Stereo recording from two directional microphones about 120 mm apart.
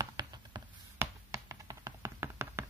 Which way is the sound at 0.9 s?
25° right (ahead or behind).